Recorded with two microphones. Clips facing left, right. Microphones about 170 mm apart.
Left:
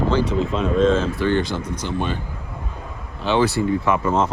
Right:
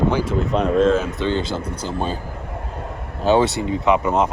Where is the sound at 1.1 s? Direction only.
20° right (ahead or behind); by 2.2 s 35° right (ahead or behind).